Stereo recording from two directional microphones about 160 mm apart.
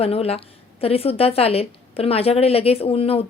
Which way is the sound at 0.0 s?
40° left (ahead or behind).